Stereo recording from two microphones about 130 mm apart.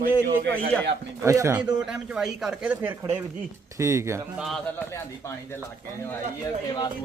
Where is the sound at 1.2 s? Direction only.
25° right (ahead or behind).